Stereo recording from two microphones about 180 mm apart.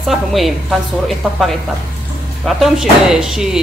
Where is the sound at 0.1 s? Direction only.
Centre (ahead or behind).